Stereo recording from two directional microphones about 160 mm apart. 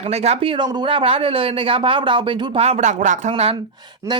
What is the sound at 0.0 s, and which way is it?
Speech, 40° right (ahead or behind).